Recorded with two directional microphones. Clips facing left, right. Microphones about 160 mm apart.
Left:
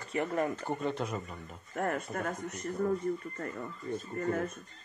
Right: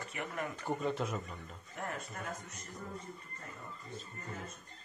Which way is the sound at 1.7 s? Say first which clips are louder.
Left 9 dB; 55° left (ahead or behind).